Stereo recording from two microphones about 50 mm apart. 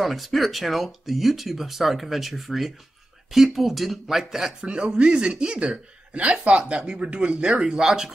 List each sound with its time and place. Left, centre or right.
0.0 s speech: centre